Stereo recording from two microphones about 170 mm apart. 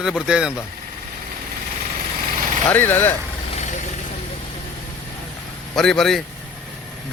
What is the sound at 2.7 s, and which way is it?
Speech, 10° left (ahead or behind).